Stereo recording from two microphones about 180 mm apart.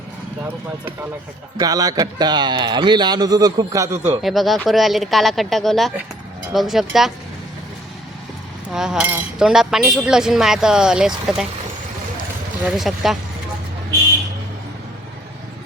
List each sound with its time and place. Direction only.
1.5 s speech: 20° right (ahead or behind)
4.2 s speech: centre (ahead or behind)
8.7 s speech: 5° right (ahead or behind)
12.6 s speech: centre (ahead or behind)